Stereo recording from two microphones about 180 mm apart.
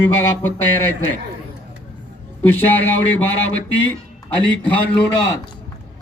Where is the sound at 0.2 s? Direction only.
15° left (ahead or behind).